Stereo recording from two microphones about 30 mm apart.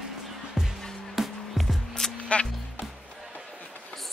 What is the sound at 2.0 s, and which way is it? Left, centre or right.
Music, left.